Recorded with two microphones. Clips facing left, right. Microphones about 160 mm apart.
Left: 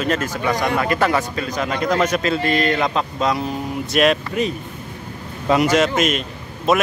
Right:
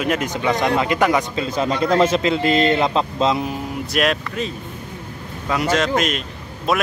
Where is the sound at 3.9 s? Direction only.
Centre (ahead or behind).